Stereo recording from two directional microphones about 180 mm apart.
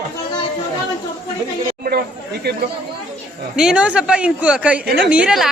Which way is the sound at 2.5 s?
65° right (ahead or behind).